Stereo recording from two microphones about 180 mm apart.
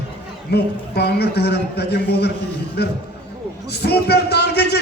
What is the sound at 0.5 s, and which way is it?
A man's voice, 65° left (ahead or behind).